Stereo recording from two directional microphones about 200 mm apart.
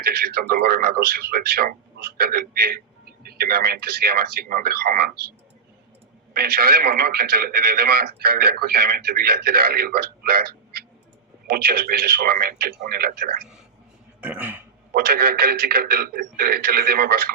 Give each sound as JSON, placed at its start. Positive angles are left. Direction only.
{"t": 0.0, "sound": "a man's voice", "side_deg": -50}
{"t": 6.3, "sound": "a man's voice", "side_deg": -50}
{"t": 14.2, "sound": "speech", "side_deg": -5}
{"t": 14.9, "sound": "a man's voice", "side_deg": -50}